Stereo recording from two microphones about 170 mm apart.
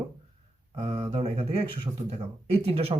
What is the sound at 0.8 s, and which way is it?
Speech, 35° right (ahead or behind).